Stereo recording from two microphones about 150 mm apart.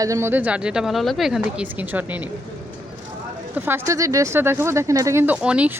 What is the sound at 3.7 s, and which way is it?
Speech, 15° right (ahead or behind).